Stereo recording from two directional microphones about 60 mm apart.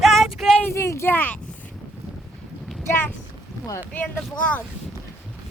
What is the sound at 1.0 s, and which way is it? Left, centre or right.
Speech, left.